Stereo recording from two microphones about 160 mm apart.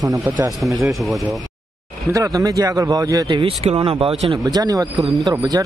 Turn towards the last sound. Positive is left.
turn(degrees=-25)  # may be behind; listen again after turning